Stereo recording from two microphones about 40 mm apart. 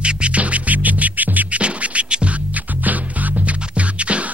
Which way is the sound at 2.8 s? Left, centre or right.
Right.